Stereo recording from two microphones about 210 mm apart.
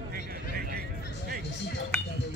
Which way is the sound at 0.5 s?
45° right (ahead or behind).